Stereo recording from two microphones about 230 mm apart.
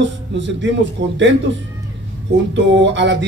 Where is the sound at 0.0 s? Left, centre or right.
Right.